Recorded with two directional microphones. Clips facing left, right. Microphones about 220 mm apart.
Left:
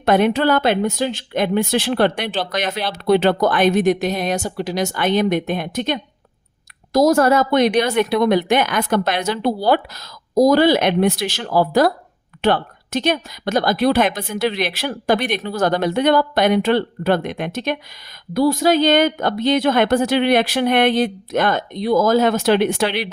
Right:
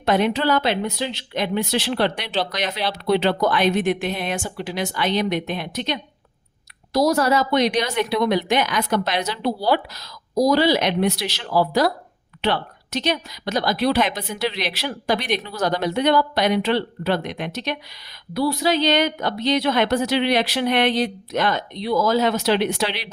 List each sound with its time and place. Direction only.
0.0 s speech: 55° left (ahead or behind)